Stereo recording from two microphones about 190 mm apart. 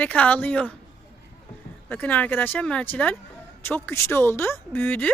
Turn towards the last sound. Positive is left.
turn(degrees=10)  # may be behind; listen again after turning